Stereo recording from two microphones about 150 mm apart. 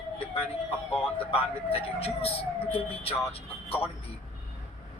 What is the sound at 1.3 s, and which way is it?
Speech, 40° left (ahead or behind).